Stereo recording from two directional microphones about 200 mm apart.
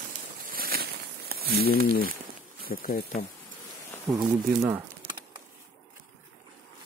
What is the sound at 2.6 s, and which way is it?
Speech, 45° left (ahead or behind).